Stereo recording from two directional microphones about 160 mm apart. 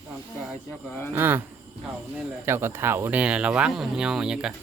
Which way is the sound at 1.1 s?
15° right (ahead or behind).